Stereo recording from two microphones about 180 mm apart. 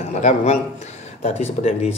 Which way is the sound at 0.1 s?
40° left (ahead or behind).